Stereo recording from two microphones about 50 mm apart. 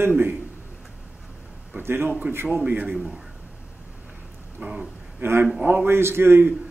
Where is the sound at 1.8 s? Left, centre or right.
Right.